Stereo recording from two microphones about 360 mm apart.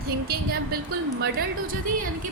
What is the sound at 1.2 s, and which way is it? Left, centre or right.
Speech, right.